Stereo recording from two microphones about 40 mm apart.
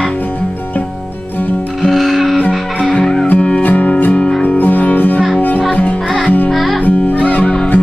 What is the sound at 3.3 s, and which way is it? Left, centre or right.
Music, left.